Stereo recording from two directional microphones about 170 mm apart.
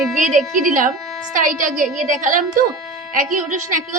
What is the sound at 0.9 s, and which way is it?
Music, centre (ahead or behind).